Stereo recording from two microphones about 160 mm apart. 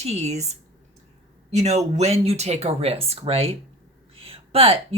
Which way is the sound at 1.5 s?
45° right (ahead or behind).